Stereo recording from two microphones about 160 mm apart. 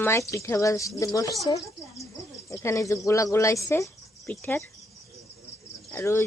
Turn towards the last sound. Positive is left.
turn(degrees=15)  # may be behind; listen again after turning